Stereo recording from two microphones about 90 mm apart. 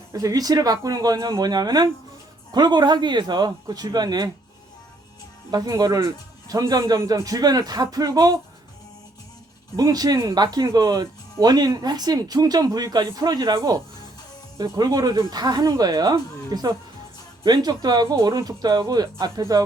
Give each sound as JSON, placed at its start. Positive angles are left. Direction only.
{"t": 0.1, "sound": "speech", "side_deg": -40}
{"t": 5.5, "sound": "speech", "side_deg": -45}
{"t": 9.7, "sound": "speech", "side_deg": -45}